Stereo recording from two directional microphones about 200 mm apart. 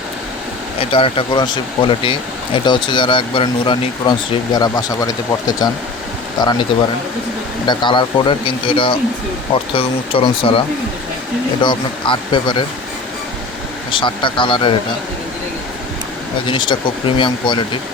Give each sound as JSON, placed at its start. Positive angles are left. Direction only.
{"t": 0.8, "sound": "speech", "side_deg": 25}
{"t": 7.7, "sound": "speech", "side_deg": 25}
{"t": 11.6, "sound": "speech", "side_deg": 25}
{"t": 13.9, "sound": "speech", "side_deg": 25}
{"t": 16.5, "sound": "speech", "side_deg": 25}